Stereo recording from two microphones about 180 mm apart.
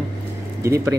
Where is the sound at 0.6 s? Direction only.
15° right (ahead or behind).